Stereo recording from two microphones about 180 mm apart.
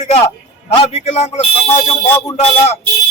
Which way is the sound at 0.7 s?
35° left (ahead or behind).